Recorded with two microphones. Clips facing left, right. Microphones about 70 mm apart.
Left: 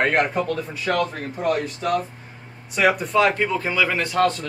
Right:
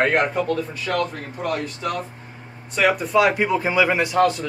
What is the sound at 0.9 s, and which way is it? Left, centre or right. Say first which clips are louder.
Speech: left 2 dB; left.